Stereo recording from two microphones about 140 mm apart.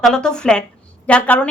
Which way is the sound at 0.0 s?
5° left (ahead or behind).